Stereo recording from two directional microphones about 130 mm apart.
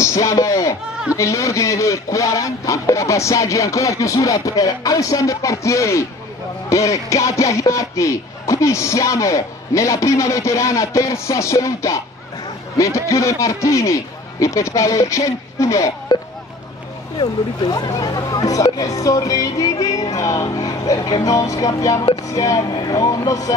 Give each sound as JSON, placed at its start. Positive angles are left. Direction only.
{"t": 0.0, "sound": "bleat", "side_deg": 25}
{"t": 1.1, "sound": "music", "side_deg": 25}
{"t": 17.2, "sound": "music", "side_deg": 30}